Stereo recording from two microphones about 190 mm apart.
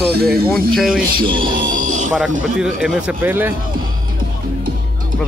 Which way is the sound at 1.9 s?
40° right (ahead or behind).